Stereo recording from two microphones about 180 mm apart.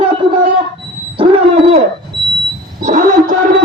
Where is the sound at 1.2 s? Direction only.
35° right (ahead or behind).